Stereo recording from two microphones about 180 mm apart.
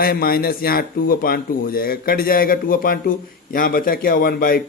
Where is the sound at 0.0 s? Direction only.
55° left (ahead or behind).